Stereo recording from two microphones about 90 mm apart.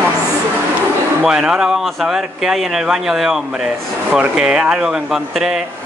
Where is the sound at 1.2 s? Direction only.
10° right (ahead or behind).